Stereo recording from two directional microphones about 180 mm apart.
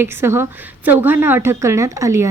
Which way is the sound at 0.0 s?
15° right (ahead or behind).